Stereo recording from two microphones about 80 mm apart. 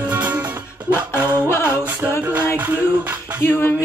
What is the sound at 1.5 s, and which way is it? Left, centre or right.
Music, left.